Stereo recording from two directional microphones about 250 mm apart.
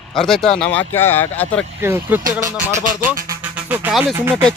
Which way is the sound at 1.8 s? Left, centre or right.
Centre.